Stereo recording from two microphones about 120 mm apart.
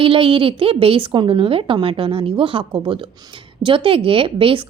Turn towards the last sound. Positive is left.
turn(degrees=-50)  # may be behind; listen again after turning